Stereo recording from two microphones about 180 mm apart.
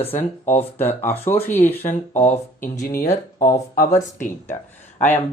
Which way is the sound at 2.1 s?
40° left (ahead or behind).